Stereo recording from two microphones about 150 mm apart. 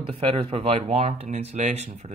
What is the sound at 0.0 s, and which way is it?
Speech, 40° right (ahead or behind).